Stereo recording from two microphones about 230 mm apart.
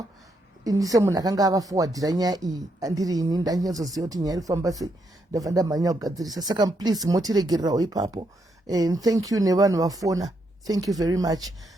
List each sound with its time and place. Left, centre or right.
0.6 s speech: centre